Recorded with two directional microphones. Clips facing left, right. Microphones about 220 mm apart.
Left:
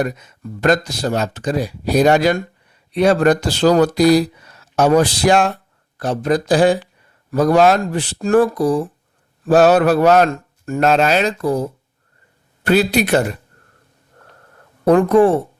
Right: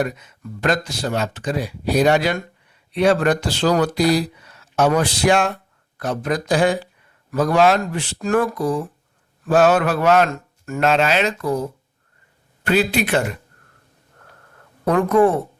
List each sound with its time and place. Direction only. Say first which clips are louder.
0.0 s speech: left 2 dB; 40° left (ahead or behind)
12.6 s speech: left 4 dB; 40° left (ahead or behind)
14.8 s speech: left 4 dB; 30° left (ahead or behind)